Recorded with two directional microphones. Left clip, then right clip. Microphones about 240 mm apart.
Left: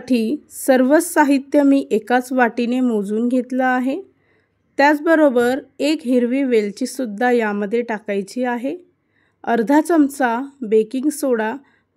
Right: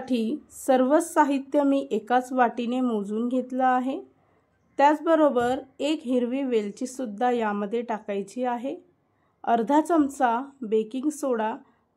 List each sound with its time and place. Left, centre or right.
0.0 s a woman's voice: left